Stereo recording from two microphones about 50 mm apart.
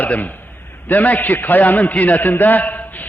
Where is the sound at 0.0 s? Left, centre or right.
Left.